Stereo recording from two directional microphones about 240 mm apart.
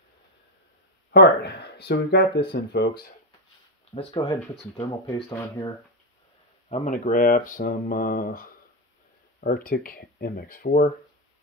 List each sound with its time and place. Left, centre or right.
1.1 s speech: left
3.9 s speech: left
6.7 s speech: left